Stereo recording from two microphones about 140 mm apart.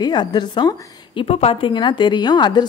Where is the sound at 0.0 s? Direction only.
30° left (ahead or behind).